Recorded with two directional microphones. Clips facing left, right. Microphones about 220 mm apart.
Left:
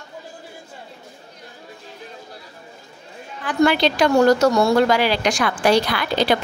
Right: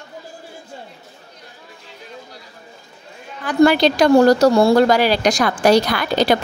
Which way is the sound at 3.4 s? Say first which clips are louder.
Right 4 dB; 40° right (ahead or behind).